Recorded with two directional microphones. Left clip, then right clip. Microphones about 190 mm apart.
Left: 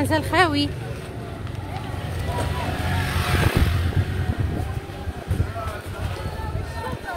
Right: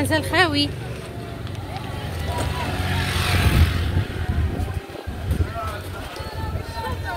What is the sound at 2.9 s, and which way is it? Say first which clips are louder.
Vehicle: right 3 dB; 30° left (ahead or behind).